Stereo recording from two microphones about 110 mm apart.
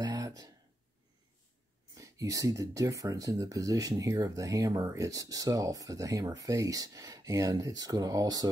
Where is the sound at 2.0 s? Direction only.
30° right (ahead or behind).